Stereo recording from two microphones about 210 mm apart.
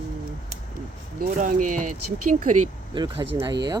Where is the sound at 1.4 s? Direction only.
40° right (ahead or behind).